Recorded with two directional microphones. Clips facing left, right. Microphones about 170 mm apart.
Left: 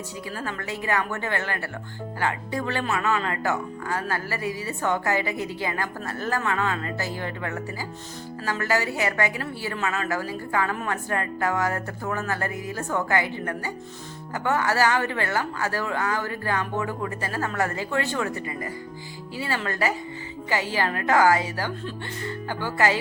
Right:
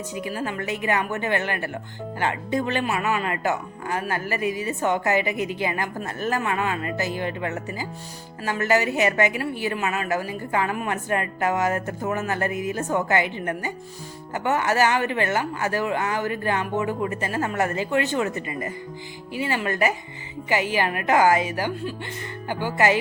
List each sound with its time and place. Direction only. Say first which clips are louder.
0.3 s a woman's voice: right 4 dB; 15° right (ahead or behind)